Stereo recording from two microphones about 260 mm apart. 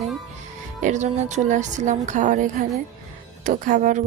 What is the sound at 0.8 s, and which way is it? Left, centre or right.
A woman's voice, right.